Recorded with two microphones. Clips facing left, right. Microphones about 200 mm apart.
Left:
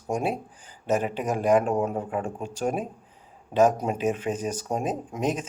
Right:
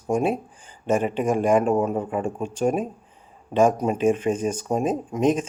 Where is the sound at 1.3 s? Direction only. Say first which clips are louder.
Right 2 dB; 50° right (ahead or behind).